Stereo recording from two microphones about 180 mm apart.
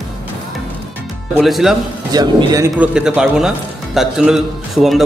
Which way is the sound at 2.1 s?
20° right (ahead or behind).